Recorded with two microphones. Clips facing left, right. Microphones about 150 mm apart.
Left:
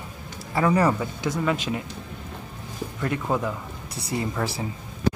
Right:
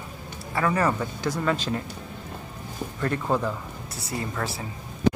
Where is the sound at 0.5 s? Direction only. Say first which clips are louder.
Left 3 dB; 20° left (ahead or behind).